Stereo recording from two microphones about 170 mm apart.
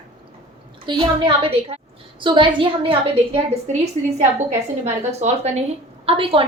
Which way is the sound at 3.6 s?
40° right (ahead or behind).